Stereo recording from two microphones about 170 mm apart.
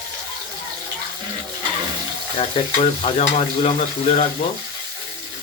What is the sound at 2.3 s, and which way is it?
Stir, 35° left (ahead or behind).